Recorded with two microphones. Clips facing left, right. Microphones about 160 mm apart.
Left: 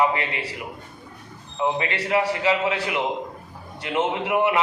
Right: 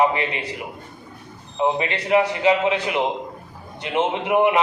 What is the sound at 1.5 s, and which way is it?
A man's voice, 20° right (ahead or behind).